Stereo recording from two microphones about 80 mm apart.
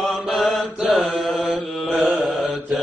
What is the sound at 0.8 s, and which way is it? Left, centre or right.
Mantra, centre.